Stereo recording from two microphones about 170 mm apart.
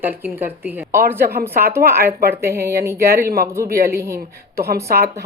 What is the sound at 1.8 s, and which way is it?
Speech, 60° right (ahead or behind).